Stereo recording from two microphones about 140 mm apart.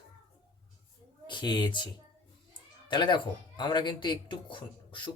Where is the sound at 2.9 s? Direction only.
35° left (ahead or behind).